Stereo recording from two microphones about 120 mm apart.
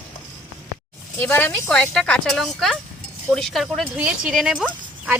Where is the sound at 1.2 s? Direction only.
20° left (ahead or behind).